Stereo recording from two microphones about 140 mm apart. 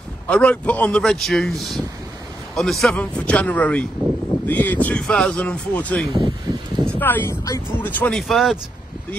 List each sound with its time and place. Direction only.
0.3 s a man's voice: 10° left (ahead or behind)
6.1 s speech: 35° right (ahead or behind)
6.9 s speech: 15° left (ahead or behind)